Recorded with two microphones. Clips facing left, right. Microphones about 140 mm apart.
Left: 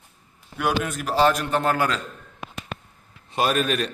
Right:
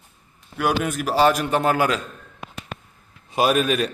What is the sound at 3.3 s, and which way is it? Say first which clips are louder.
Speech: right 3 dB; 5° right (ahead or behind).